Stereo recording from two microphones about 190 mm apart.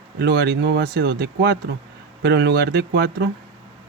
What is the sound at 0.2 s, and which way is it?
Speech, 55° right (ahead or behind).